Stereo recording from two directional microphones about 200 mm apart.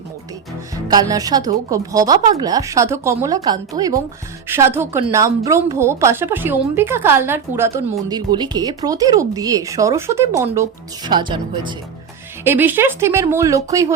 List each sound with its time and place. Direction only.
0.9 s speech: 20° right (ahead or behind)
12.5 s speech: 10° right (ahead or behind)